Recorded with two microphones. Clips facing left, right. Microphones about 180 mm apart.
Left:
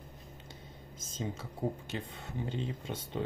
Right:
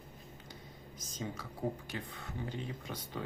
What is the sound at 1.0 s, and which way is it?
Speech, 25° left (ahead or behind).